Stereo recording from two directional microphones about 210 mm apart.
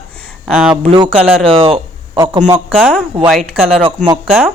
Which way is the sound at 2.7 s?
5° left (ahead or behind).